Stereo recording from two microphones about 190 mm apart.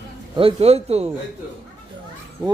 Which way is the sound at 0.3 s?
30° right (ahead or behind).